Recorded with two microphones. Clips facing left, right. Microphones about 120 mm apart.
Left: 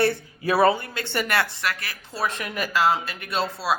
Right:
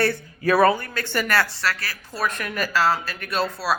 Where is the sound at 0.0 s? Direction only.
20° left (ahead or behind).